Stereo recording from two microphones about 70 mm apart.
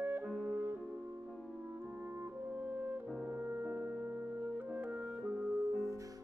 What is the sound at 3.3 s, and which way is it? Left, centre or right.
Music, centre.